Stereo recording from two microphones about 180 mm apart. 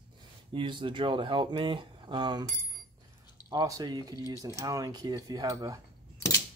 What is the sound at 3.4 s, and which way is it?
Speech, 20° right (ahead or behind).